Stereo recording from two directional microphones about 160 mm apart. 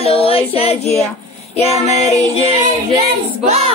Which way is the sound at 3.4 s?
40° right (ahead or behind).